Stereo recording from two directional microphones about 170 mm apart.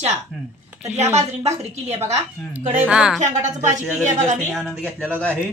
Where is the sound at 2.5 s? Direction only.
10° right (ahead or behind).